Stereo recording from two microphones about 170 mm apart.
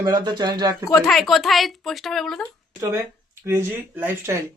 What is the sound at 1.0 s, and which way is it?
A woman's voice, centre (ahead or behind).